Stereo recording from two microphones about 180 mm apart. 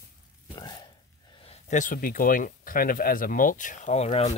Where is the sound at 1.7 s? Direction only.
45° left (ahead or behind).